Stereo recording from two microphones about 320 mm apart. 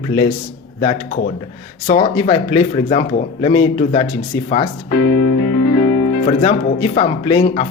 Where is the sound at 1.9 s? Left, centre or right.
Centre.